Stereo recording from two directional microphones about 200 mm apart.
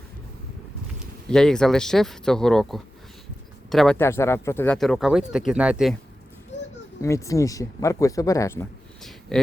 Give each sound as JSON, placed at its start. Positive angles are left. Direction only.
{"t": 1.3, "sound": "speech", "side_deg": 5}
{"t": 7.0, "sound": "speech", "side_deg": 15}
{"t": 9.3, "sound": "speech", "side_deg": 5}